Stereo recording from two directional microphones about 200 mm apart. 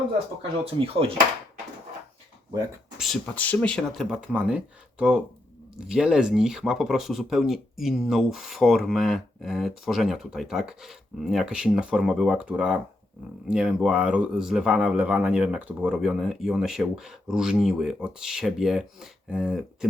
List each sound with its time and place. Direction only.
0.6 s speech: 30° right (ahead or behind)
3.0 s speech: 5° left (ahead or behind)